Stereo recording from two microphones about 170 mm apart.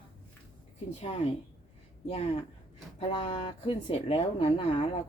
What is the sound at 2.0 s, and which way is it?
Speech, 35° left (ahead or behind).